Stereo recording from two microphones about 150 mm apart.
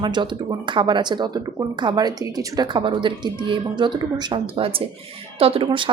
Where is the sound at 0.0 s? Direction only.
30° right (ahead or behind).